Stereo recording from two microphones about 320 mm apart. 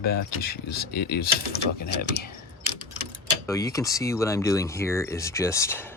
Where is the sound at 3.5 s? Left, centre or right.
Centre.